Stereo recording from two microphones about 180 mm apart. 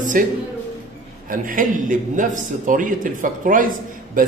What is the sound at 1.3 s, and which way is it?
A man's voice, 50° right (ahead or behind).